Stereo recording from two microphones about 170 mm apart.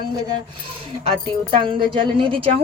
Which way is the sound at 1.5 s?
30° right (ahead or behind).